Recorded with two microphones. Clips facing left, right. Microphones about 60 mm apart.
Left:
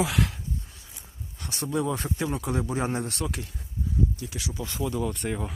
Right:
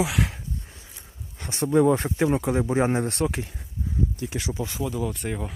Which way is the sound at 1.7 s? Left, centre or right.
Right.